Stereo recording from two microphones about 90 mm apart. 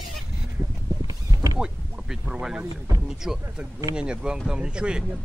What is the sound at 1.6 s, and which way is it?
Speech, 10° right (ahead or behind).